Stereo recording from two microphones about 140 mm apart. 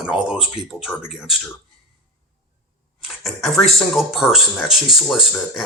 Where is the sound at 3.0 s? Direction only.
Centre (ahead or behind).